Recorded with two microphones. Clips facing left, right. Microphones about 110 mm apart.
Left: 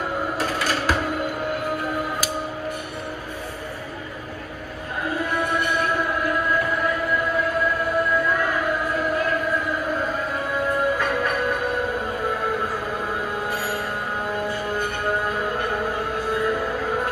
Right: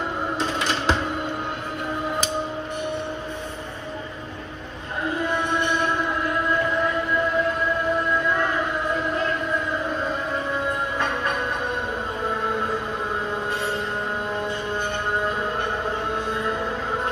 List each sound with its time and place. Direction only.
0.4 s music: 25° right (ahead or behind)